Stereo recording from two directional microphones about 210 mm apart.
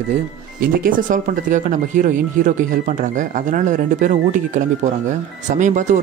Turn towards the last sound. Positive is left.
turn(degrees=-35)  # may be behind; listen again after turning